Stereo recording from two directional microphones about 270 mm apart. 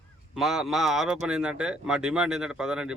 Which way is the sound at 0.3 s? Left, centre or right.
Centre.